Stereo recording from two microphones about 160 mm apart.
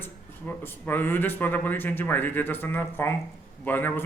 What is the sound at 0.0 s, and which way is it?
Speech, 10° left (ahead or behind).